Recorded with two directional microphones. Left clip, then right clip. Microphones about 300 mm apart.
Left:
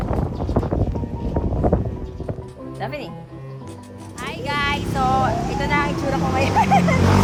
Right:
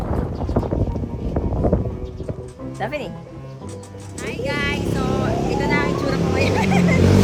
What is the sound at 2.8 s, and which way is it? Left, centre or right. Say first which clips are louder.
Music: right 3 dB; centre.